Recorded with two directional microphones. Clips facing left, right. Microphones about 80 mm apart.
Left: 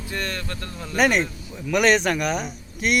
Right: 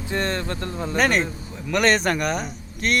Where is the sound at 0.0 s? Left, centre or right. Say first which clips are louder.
Right 5 dB; right.